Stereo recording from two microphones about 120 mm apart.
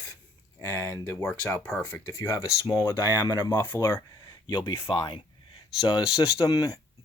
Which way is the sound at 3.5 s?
20° left (ahead or behind).